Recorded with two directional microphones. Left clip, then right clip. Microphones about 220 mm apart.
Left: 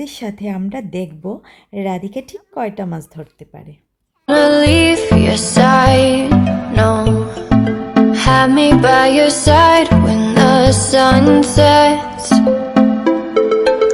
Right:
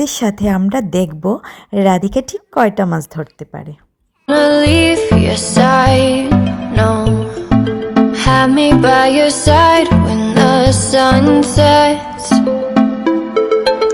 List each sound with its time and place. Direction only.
0.0 s speech: 20° right (ahead or behind)
4.3 s music: centre (ahead or behind)